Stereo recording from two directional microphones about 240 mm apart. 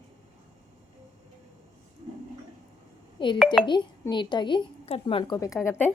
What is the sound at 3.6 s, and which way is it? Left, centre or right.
A woman's voice, centre.